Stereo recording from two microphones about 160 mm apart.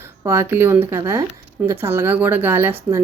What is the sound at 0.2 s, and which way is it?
A woman's voice, 20° right (ahead or behind).